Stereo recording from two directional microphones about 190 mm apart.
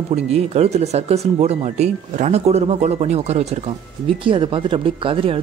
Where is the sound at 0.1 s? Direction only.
35° right (ahead or behind).